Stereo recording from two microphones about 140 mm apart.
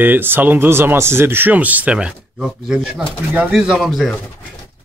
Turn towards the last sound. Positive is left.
turn(degrees=-5)  # may be behind; listen again after turning